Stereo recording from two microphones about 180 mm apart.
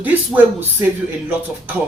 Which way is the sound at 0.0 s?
10° right (ahead or behind).